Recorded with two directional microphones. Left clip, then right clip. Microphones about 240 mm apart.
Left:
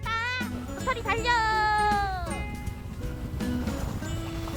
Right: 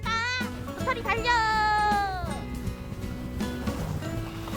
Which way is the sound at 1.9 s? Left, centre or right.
Centre.